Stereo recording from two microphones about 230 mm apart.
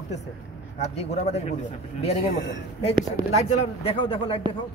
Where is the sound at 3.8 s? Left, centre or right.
Left.